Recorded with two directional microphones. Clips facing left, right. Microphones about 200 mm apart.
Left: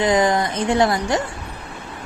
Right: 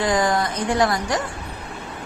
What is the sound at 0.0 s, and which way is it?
Speech, 20° left (ahead or behind).